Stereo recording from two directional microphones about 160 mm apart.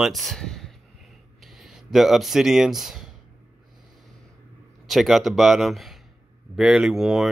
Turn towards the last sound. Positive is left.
turn(degrees=-5)  # may be behind; listen again after turning